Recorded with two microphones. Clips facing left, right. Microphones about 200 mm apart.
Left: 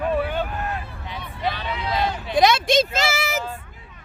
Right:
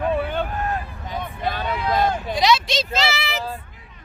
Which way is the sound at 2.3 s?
50° left (ahead or behind).